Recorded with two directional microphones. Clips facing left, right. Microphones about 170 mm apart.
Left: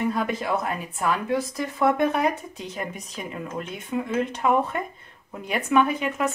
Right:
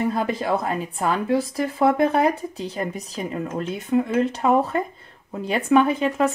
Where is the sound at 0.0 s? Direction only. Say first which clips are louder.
Right 2 dB; 30° right (ahead or behind).